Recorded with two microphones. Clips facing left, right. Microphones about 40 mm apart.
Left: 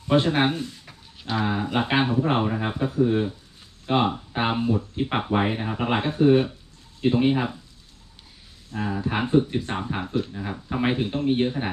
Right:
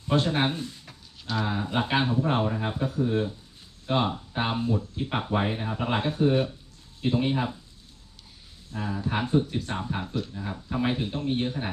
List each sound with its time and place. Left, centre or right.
0.1 s speech: left
8.7 s speech: left